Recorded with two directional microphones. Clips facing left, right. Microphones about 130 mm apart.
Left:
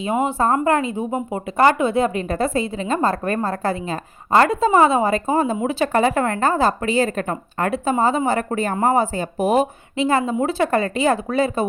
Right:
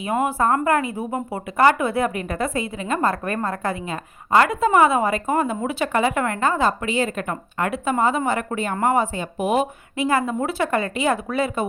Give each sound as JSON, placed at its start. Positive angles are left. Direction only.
{"t": 0.0, "sound": "a woman's voice", "side_deg": 25}
{"t": 10.0, "sound": "a woman's voice", "side_deg": 25}